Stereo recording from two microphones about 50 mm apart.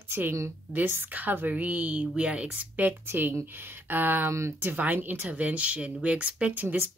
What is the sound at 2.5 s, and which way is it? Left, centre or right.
Speech, right.